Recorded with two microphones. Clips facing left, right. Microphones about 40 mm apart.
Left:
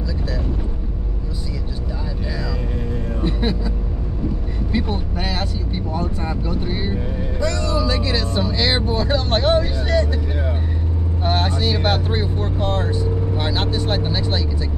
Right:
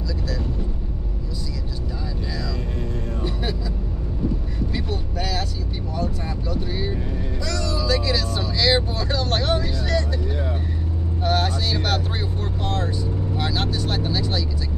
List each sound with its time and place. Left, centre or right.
3.2 s music: left
4.7 s vehicle: left
11.2 s vehicle: left